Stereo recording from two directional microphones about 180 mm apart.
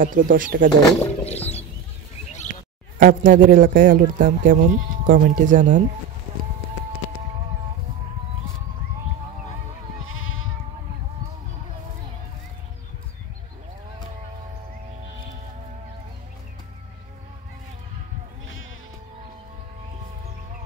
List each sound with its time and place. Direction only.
0.0 s speech: 50° right (ahead or behind)
0.8 s speech: 15° left (ahead or behind)
3.0 s speech: 50° right (ahead or behind)
10.0 s goat: 90° left